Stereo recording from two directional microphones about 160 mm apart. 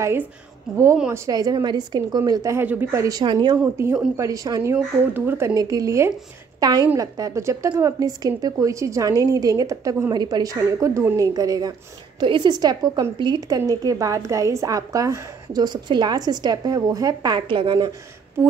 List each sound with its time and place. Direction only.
0.0 s a woman's voice: 15° right (ahead or behind)
3.6 s a woman's voice: 15° right (ahead or behind)